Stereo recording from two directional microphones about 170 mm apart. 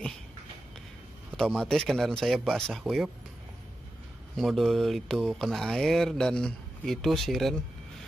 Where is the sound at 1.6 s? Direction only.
5° left (ahead or behind).